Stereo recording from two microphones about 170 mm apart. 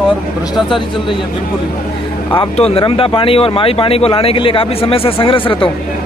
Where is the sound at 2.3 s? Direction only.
30° left (ahead or behind).